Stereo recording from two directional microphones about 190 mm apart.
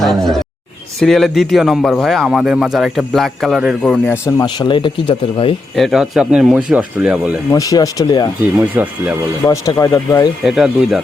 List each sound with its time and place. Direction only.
0.0 s a man's voice: centre (ahead or behind); by 5.5 s 25° left (ahead or behind)
5.7 s a man's voice: centre (ahead or behind)
7.5 s speech: 20° left (ahead or behind)
8.5 s speech: 10° right (ahead or behind)
9.5 s speech: 15° left (ahead or behind)
10.4 s a man's voice: centre (ahead or behind)